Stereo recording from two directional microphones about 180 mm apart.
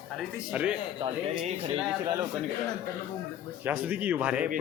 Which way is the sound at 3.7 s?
10° right (ahead or behind).